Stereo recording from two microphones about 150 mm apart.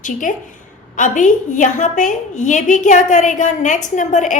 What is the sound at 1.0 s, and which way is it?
A woman's voice, 55° left (ahead or behind).